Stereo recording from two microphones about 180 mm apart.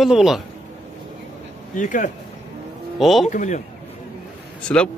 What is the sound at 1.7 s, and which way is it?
Speech, 45° left (ahead or behind).